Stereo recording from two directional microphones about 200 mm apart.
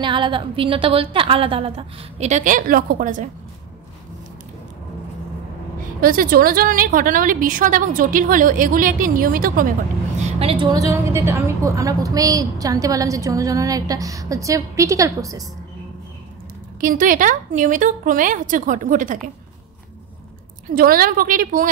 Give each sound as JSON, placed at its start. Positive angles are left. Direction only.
{"t": 0.0, "sound": "a woman's voice", "side_deg": -25}
{"t": 5.9, "sound": "a woman's voice", "side_deg": -45}
{"t": 10.2, "sound": "a woman's voice", "side_deg": -25}
{"t": 16.8, "sound": "speech", "side_deg": -45}
{"t": 20.7, "sound": "a woman's voice", "side_deg": -45}